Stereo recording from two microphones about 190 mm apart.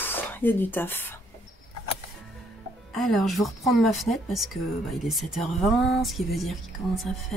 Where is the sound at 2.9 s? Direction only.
Centre (ahead or behind).